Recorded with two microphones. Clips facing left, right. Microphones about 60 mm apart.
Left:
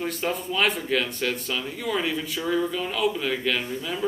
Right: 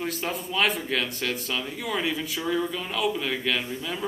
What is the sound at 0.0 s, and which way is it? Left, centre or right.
A man's voice, centre.